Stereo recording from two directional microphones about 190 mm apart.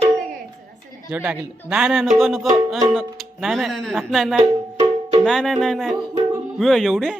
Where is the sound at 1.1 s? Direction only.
5° right (ahead or behind).